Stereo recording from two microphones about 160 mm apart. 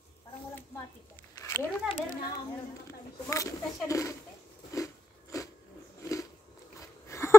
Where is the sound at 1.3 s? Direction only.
20° left (ahead or behind).